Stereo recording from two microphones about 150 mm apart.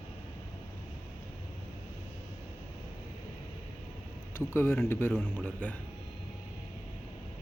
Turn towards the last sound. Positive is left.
turn(degrees=10)  # may be behind; listen again after turning